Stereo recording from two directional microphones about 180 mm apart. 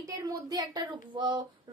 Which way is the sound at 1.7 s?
20° right (ahead or behind).